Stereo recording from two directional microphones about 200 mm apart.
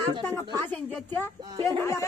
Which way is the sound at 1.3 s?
20° right (ahead or behind).